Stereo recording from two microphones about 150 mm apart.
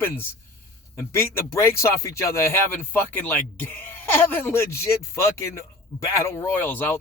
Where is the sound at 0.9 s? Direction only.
15° left (ahead or behind).